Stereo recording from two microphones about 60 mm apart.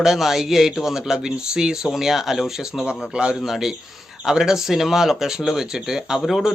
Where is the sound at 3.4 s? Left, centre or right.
Centre.